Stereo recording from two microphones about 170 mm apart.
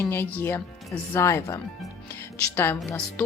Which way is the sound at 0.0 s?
15° left (ahead or behind).